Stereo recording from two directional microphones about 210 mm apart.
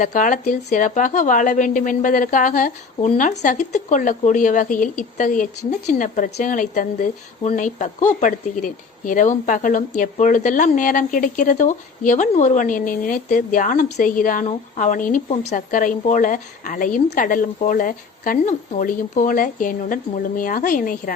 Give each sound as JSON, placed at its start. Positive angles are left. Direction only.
{"t": 0.0, "sound": "a woman's voice", "side_deg": 40}